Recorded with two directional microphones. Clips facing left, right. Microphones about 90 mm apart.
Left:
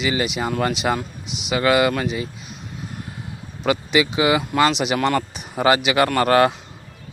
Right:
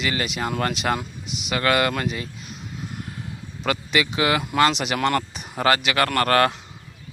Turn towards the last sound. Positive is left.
turn(degrees=15)  # may be behind; listen again after turning